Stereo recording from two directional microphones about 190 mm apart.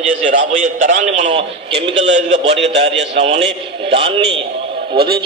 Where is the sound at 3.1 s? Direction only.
35° right (ahead or behind).